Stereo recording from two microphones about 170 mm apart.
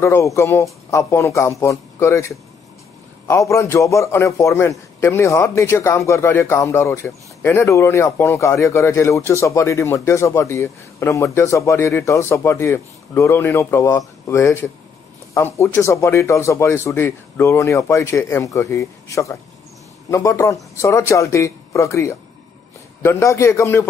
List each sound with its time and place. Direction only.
0.0 s a man's voice: 15° left (ahead or behind)